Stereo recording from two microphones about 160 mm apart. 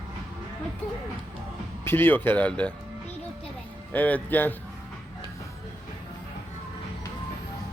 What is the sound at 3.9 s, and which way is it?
Speech, 10° left (ahead or behind).